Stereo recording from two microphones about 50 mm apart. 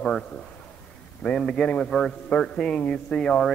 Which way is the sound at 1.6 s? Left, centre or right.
Left.